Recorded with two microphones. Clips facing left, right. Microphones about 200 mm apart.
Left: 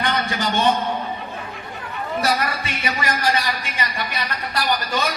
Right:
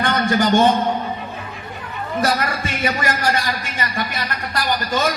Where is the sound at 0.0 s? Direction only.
45° right (ahead or behind).